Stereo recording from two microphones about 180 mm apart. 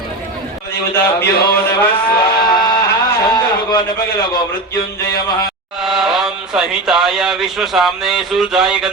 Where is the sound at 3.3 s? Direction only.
25° left (ahead or behind).